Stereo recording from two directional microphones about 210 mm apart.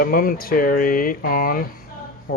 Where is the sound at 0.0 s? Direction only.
45° left (ahead or behind).